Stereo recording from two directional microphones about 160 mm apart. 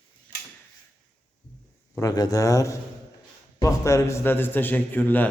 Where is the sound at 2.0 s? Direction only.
25° left (ahead or behind).